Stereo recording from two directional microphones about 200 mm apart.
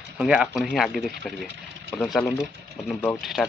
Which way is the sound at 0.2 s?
5° right (ahead or behind).